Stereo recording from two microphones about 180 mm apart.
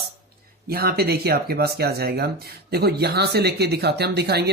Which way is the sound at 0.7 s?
60° right (ahead or behind).